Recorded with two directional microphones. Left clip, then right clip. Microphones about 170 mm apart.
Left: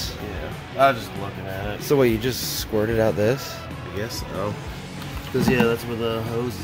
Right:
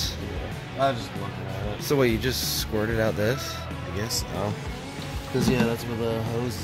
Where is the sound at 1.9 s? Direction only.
15° left (ahead or behind).